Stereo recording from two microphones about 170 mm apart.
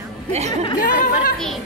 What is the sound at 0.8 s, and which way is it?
Speech, 55° left (ahead or behind).